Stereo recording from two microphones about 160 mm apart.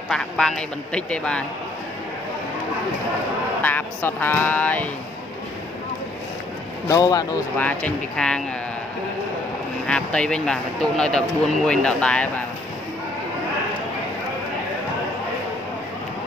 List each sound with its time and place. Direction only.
0.1 s speech: 5° left (ahead or behind)
3.6 s speech: 10° left (ahead or behind)
6.9 s speech: 25° left (ahead or behind)
7.5 s speech: 10° left (ahead or behind)
9.8 s speech: 5° left (ahead or behind)